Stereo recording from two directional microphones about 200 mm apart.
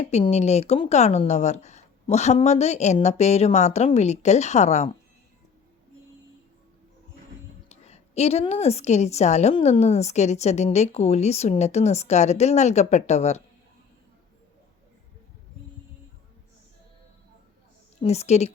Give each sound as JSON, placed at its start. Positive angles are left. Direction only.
{"t": 0.0, "sound": "a woman's voice", "side_deg": 35}
{"t": 7.7, "sound": "a woman's voice", "side_deg": 30}
{"t": 18.0, "sound": "a woman's voice", "side_deg": 35}